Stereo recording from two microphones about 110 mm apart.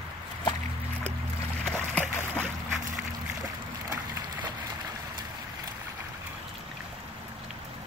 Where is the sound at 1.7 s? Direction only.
15° left (ahead or behind).